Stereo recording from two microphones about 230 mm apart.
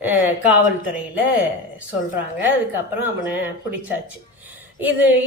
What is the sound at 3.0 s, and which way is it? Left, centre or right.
Speech, centre.